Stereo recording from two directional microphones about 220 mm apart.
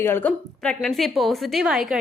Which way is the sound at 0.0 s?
10° left (ahead or behind).